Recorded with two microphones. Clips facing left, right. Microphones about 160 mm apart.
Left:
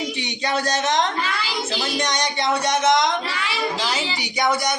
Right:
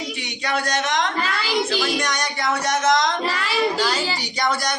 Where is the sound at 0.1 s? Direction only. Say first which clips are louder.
Left 3 dB; 25° left (ahead or behind).